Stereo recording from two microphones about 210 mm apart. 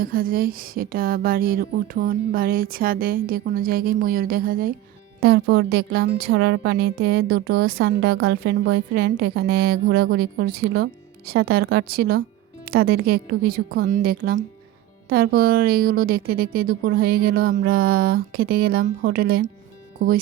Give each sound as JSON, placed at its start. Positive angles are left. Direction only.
{"t": 0.0, "sound": "speech", "side_deg": -45}